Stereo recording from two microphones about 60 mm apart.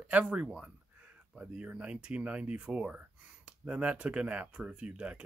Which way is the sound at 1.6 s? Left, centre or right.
Right.